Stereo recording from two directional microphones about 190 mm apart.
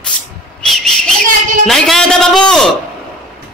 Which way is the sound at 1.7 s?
Centre (ahead or behind).